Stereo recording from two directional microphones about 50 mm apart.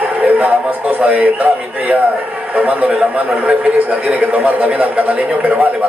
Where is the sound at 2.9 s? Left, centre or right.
Centre.